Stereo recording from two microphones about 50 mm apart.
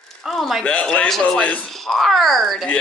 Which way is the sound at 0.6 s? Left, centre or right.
Left.